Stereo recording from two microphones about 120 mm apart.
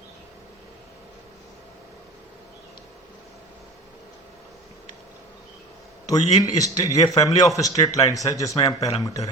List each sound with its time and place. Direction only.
6.1 s speech: 30° left (ahead or behind)